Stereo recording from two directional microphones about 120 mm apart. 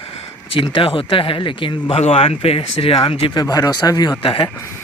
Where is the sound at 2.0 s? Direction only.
60° left (ahead or behind).